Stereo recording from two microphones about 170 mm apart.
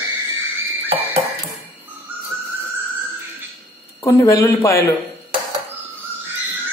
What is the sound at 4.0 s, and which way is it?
Speech, 15° left (ahead or behind).